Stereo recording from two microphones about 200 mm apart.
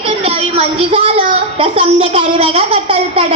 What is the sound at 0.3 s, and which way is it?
A child's voice, 25° right (ahead or behind).